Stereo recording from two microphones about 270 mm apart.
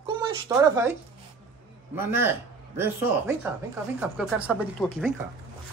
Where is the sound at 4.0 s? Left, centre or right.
Centre.